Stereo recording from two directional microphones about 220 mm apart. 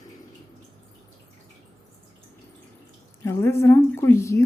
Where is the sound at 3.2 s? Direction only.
10° left (ahead or behind).